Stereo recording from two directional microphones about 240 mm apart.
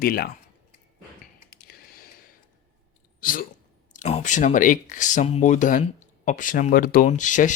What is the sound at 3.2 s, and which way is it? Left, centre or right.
Speech, left.